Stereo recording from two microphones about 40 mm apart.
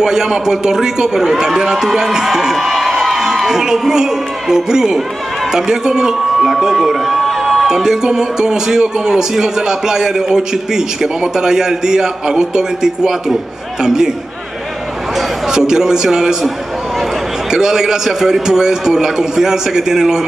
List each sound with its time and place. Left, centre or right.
0.0 s a man's voice: centre
2.5 s crowd: centre
3.4 s a man's voice: centre
6.6 s a sound: centre
7.6 s a man's voice: centre
15.1 s a man's voice: centre